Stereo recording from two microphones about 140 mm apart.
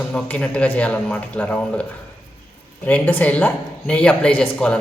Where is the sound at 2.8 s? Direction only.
10° left (ahead or behind).